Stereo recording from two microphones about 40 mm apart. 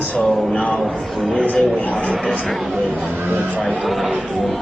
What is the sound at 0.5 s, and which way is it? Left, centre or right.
A man's voice, left.